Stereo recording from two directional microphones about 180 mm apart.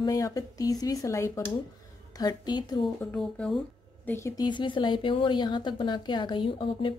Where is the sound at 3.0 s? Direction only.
5° left (ahead or behind).